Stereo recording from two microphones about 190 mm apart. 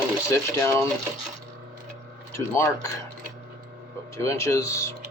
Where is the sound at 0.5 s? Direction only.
15° left (ahead or behind).